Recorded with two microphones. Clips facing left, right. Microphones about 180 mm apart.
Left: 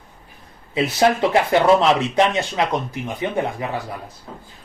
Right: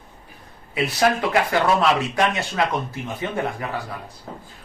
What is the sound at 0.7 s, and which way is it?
A man's voice, 25° left (ahead or behind).